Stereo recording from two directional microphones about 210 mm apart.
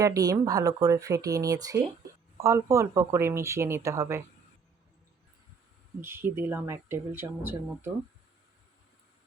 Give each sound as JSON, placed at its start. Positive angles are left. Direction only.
{"t": 0.0, "sound": "speech", "side_deg": -15}
{"t": 6.0, "sound": "speech", "side_deg": -10}